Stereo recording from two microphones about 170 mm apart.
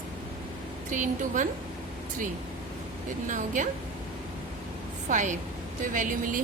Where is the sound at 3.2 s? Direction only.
50° right (ahead or behind).